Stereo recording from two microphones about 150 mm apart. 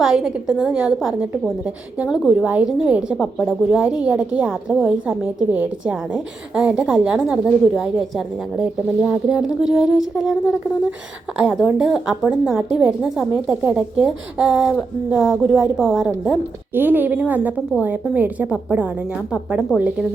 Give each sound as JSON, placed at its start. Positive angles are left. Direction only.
{"t": 0.0, "sound": "a woman's voice", "side_deg": -5}
{"t": 11.5, "sound": "a woman's voice", "side_deg": 0}
{"t": 16.7, "sound": "a woman's voice", "side_deg": -10}